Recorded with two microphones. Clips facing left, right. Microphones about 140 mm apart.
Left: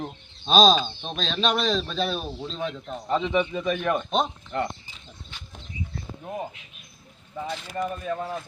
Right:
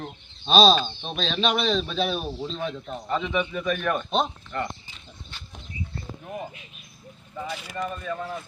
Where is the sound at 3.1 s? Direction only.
25° left (ahead or behind).